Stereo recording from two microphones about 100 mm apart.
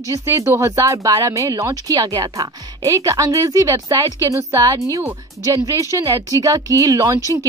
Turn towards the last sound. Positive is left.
turn(degrees=-35)  # may be behind; listen again after turning